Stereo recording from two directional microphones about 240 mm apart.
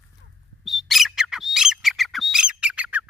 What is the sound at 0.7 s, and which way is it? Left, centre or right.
Bird, centre.